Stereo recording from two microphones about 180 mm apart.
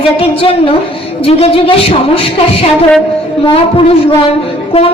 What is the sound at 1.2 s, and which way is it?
Speech, 30° left (ahead or behind).